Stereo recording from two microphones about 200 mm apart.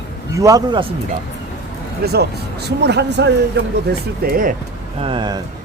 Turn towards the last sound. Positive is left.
turn(degrees=-20)  # may be behind; listen again after turning